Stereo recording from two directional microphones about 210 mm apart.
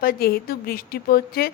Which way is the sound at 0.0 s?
45° left (ahead or behind).